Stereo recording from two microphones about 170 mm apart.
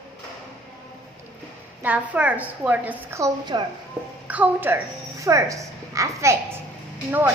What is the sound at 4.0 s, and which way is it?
A child's voice, 5° right (ahead or behind).